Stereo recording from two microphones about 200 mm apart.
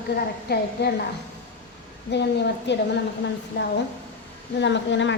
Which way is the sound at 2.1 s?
60° left (ahead or behind).